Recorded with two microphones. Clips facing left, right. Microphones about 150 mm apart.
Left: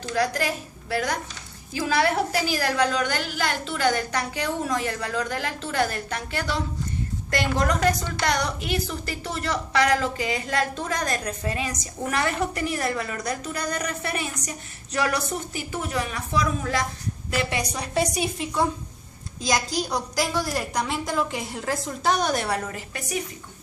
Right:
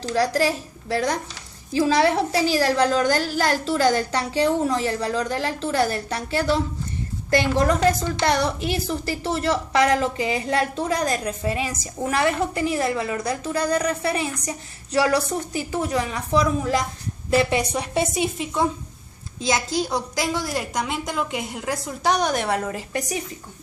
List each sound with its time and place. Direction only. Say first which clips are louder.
0.0 s a woman's voice: right 4 dB; 35° right (ahead or behind)
17.3 s a woman's voice: right 7 dB; 30° right (ahead or behind)
22.7 s a woman's voice: right 4 dB; 30° right (ahead or behind)